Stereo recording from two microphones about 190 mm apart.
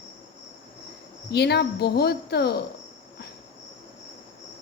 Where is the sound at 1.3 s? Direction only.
60° left (ahead or behind).